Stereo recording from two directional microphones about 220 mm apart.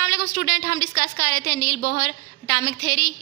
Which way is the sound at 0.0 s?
55° left (ahead or behind).